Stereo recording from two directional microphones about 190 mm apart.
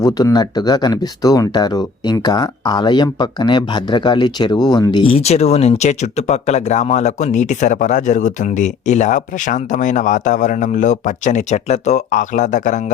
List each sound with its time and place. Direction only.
0.0 s speech: 20° left (ahead or behind); by 12.8 s 40° left (ahead or behind)